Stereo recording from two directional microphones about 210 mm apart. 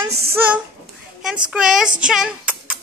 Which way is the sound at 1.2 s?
5° right (ahead or behind).